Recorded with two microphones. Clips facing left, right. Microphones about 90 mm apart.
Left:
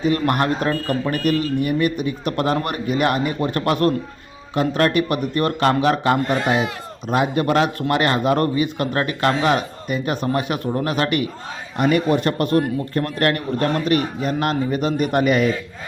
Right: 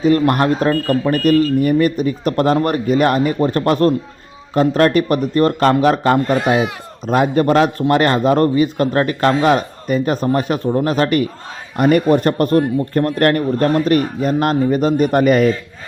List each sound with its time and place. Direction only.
0.0 s a man's voice: 40° right (ahead or behind)
6.4 s speech: 15° right (ahead or behind)
7.1 s a man's voice: 40° right (ahead or behind)